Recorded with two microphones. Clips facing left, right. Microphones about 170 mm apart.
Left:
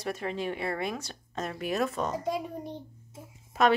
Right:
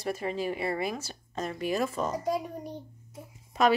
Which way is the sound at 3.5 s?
5° left (ahead or behind).